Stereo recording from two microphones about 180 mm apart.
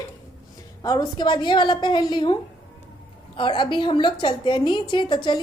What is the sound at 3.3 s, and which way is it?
A woman's voice, 25° left (ahead or behind).